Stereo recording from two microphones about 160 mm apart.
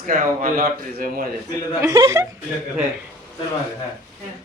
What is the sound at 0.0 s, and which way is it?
Speech, 60° right (ahead or behind).